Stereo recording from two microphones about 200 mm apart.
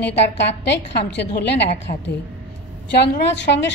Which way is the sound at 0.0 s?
60° left (ahead or behind).